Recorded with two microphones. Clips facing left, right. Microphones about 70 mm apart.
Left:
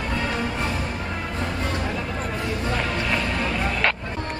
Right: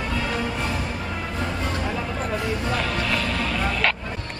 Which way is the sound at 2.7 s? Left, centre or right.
Centre.